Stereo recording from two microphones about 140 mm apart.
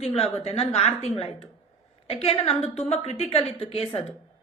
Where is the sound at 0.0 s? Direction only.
45° left (ahead or behind).